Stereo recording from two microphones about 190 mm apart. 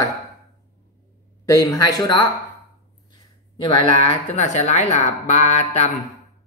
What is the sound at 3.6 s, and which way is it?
Speech, 25° left (ahead or behind).